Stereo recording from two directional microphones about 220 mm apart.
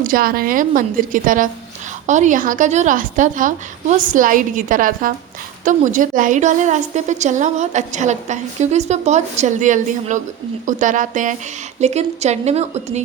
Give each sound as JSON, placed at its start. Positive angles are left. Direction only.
{"t": 0.0, "sound": "a woman's voice", "side_deg": -40}